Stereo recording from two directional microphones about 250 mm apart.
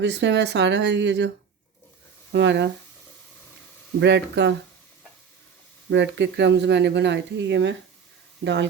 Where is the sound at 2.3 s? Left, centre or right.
Right.